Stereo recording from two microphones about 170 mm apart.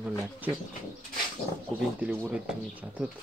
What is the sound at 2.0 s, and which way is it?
Speech, 10° right (ahead or behind).